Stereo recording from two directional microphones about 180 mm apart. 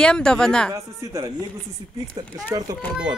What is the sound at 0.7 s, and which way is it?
Speech, 20° right (ahead or behind).